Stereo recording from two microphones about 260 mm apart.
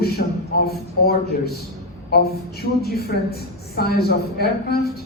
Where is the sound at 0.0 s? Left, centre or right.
Left.